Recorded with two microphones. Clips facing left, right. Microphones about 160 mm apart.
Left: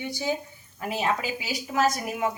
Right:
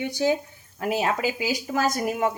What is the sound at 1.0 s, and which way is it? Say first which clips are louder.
A woman's voice: even; 45° right (ahead or behind).